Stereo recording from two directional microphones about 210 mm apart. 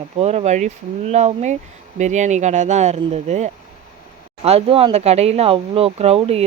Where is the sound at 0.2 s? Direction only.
30° right (ahead or behind).